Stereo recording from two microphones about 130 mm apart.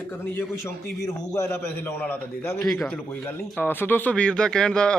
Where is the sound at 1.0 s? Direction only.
20° left (ahead or behind).